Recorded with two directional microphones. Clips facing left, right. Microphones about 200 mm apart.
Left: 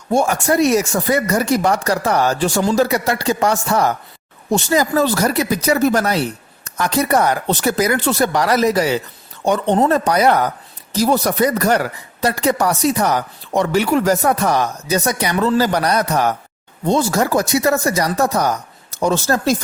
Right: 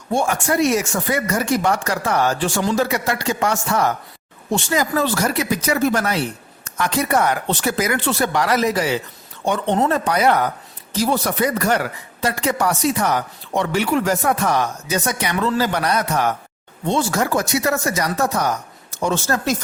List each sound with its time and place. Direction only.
0.1 s speech: 40° left (ahead or behind)